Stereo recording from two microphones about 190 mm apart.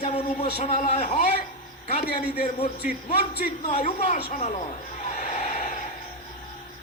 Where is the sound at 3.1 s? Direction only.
50° left (ahead or behind).